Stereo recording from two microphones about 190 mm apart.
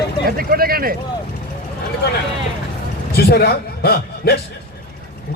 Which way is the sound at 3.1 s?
55° left (ahead or behind).